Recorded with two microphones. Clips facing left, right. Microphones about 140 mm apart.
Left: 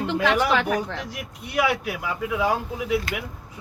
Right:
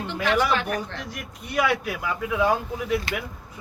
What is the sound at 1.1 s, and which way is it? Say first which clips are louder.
Speech: even; 10° left (ahead or behind).